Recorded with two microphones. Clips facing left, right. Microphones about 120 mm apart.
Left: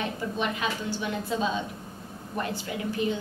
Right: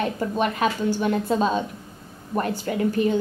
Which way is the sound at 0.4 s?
50° right (ahead or behind).